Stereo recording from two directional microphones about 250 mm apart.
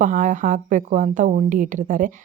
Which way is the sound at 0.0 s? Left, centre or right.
Right.